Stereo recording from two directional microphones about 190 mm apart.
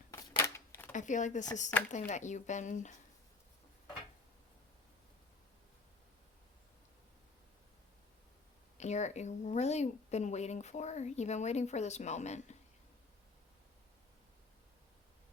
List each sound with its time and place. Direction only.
0.1 s a sound: 15° left (ahead or behind)
0.9 s a woman's voice: 40° left (ahead or behind)
8.8 s a woman's voice: 35° left (ahead or behind)